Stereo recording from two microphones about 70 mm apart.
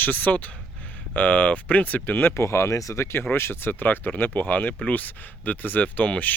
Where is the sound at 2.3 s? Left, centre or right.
Left.